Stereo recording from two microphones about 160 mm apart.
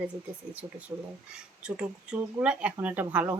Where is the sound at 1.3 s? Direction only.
5° right (ahead or behind).